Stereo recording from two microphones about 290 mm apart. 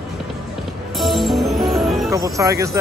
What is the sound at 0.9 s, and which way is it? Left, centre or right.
Music, centre.